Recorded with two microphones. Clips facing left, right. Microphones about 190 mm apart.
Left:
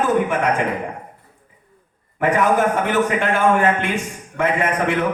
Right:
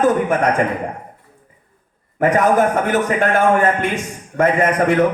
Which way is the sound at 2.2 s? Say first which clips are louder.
Right 2 dB; 40° right (ahead or behind).